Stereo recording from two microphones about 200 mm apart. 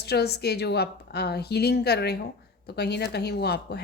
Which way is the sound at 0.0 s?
55° left (ahead or behind).